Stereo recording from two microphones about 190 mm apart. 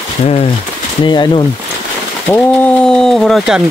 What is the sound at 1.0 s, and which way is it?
Speech, 25° left (ahead or behind).